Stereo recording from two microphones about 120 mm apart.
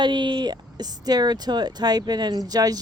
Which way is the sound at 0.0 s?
40° right (ahead or behind).